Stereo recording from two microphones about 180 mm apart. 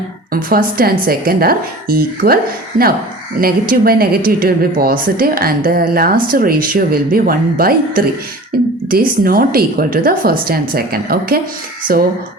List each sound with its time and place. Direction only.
0.5 s speech: 55° right (ahead or behind)